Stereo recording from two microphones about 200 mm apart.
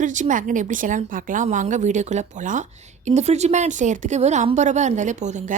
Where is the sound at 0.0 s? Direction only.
40° right (ahead or behind).